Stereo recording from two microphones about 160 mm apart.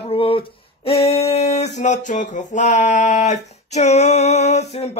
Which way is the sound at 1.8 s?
50° left (ahead or behind).